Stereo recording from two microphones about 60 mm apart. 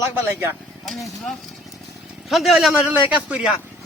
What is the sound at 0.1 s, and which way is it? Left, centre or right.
Speech, right.